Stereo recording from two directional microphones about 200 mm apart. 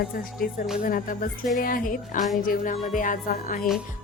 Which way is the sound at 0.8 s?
45° left (ahead or behind).